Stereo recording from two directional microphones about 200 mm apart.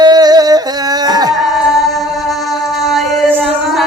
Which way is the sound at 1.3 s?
Centre (ahead or behind).